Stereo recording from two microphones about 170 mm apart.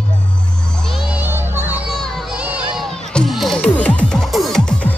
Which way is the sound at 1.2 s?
15° right (ahead or behind).